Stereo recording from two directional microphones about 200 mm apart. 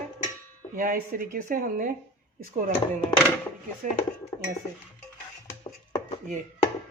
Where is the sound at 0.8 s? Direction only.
45° right (ahead or behind).